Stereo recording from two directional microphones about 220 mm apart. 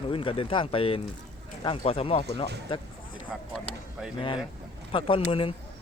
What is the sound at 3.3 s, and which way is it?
Speech, centre (ahead or behind).